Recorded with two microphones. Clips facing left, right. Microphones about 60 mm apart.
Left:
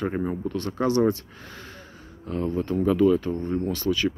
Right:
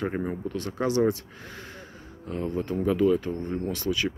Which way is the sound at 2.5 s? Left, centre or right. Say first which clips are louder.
Left 3 dB; centre.